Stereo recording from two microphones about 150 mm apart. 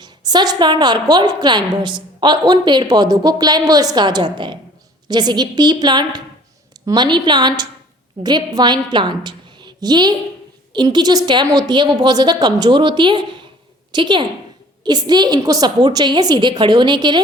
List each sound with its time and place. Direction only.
0.0 s a woman's voice: 30° right (ahead or behind)